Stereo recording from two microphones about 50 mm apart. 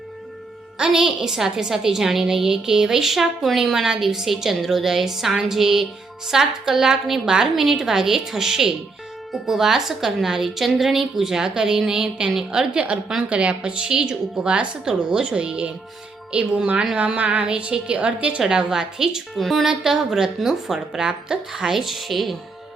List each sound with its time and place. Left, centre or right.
0.8 s a woman's voice: centre
19.3 s a woman's voice: centre